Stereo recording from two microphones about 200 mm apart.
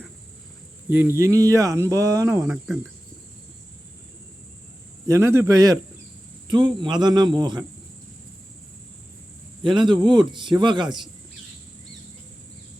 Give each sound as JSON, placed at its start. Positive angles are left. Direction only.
{"t": 0.9, "sound": "speech", "side_deg": -10}
{"t": 5.0, "sound": "a man's voice", "side_deg": -15}
{"t": 9.6, "sound": "a man's voice", "side_deg": -25}